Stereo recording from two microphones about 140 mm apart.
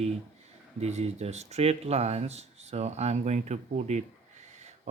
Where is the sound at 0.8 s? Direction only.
50° right (ahead or behind).